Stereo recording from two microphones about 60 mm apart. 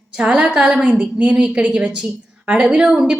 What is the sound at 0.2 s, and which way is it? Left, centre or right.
A woman's voice, centre.